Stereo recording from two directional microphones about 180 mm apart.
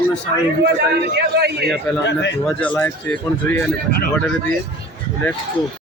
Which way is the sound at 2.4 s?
10° left (ahead or behind).